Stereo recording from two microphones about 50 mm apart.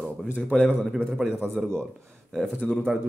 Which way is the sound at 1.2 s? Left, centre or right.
Centre.